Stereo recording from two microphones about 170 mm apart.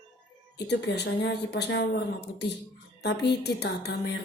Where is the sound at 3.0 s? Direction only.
75° left (ahead or behind).